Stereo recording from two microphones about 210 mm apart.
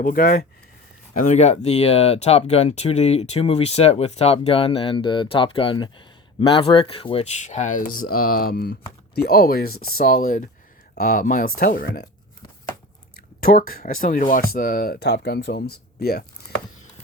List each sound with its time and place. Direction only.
0.0 s speech: 40° left (ahead or behind)
1.2 s speech: 35° left (ahead or behind)
13.4 s speech: 45° left (ahead or behind)